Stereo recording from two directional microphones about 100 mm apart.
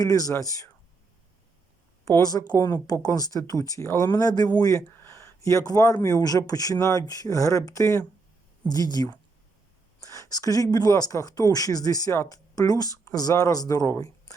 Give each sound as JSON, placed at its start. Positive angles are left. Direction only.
{"t": 0.0, "sound": "speech", "side_deg": 35}
{"t": 2.0, "sound": "speech", "side_deg": 35}
{"t": 2.6, "sound": "speech", "side_deg": 20}
{"t": 2.8, "sound": "speech", "side_deg": 35}
{"t": 4.1, "sound": "speech", "side_deg": 40}
{"t": 5.0, "sound": "speech", "side_deg": 30}
{"t": 8.6, "sound": "speech", "side_deg": 40}